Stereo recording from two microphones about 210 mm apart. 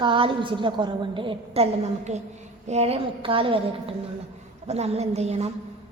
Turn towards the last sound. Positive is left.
turn(degrees=-30)  # may be behind; listen again after turning